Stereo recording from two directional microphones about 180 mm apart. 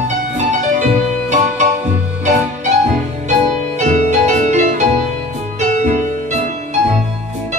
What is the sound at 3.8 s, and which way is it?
Music, 40° right (ahead or behind).